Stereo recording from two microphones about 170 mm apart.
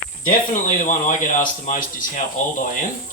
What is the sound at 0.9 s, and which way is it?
Speech, 50° left (ahead or behind).